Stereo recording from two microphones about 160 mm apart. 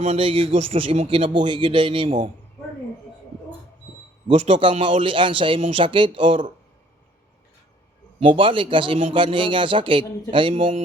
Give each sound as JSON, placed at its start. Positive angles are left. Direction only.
{"t": 0.0, "sound": "a man's voice", "side_deg": -35}
{"t": 4.3, "sound": "a man's voice", "side_deg": -35}
{"t": 8.2, "sound": "a man's voice", "side_deg": -30}